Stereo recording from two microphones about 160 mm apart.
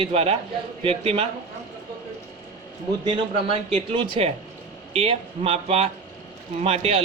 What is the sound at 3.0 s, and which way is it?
Speech, 35° right (ahead or behind).